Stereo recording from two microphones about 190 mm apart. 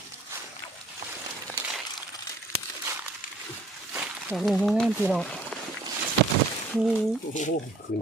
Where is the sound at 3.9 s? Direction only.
5° right (ahead or behind).